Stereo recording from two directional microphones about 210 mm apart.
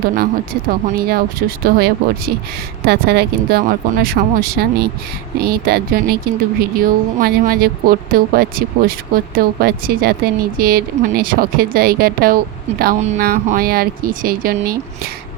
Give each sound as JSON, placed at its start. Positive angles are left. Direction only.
{"t": 0.9, "sound": "speech", "side_deg": -45}